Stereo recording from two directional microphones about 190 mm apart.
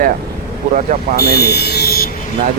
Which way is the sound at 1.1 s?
55° left (ahead or behind).